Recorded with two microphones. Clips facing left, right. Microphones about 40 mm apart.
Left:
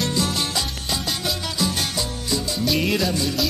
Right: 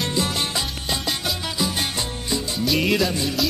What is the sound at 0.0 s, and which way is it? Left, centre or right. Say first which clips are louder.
Music: even; right.